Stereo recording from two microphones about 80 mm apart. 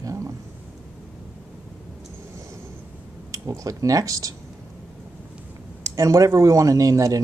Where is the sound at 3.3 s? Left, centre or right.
Right.